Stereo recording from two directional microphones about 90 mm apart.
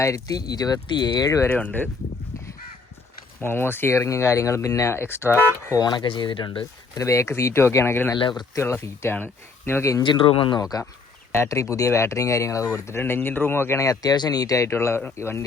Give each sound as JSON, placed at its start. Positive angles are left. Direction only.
{"t": 0.0, "sound": "speech", "side_deg": 40}
{"t": 1.5, "sound": "speech", "side_deg": 20}
{"t": 3.4, "sound": "speech", "side_deg": 25}
{"t": 5.7, "sound": "speech", "side_deg": 50}
{"t": 6.9, "sound": "speech", "side_deg": 35}
{"t": 8.2, "sound": "speech", "side_deg": 55}
{"t": 8.5, "sound": "speech", "side_deg": 30}
{"t": 10.0, "sound": "speech", "side_deg": 65}
{"t": 10.6, "sound": "speech", "side_deg": 45}
{"t": 11.3, "sound": "speech", "side_deg": 35}